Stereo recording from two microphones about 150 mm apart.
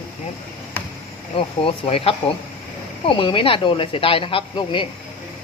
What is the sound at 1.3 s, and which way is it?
Speech, 40° left (ahead or behind).